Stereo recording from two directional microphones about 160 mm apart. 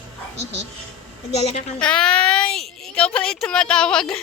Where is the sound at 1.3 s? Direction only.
40° left (ahead or behind).